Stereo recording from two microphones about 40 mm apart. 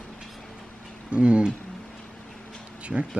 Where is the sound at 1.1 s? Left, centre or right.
Right.